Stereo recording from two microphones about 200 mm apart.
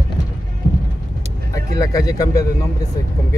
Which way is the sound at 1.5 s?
15° left (ahead or behind).